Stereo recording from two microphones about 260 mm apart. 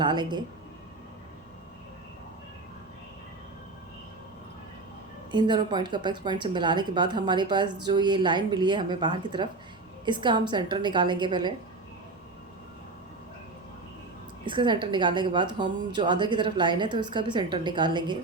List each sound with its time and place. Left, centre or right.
0.0 s speech: centre
5.3 s speech: centre
14.4 s speech: centre